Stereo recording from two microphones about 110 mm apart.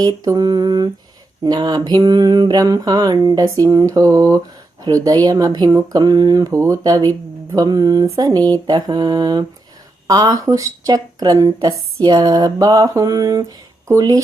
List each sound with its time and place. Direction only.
0.0 s speech: 35° right (ahead or behind)